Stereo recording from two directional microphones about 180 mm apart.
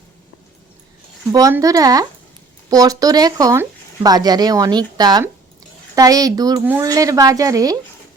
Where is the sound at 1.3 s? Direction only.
20° right (ahead or behind).